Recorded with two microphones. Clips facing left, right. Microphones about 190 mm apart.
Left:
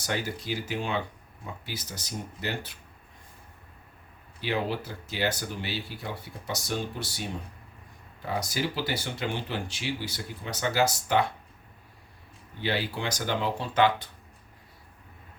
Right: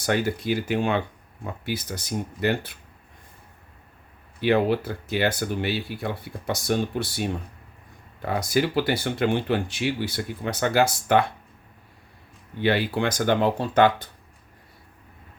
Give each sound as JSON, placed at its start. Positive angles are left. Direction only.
{"t": 0.0, "sound": "speech", "side_deg": -55}
{"t": 4.4, "sound": "speech", "side_deg": -60}
{"t": 12.6, "sound": "speech", "side_deg": -60}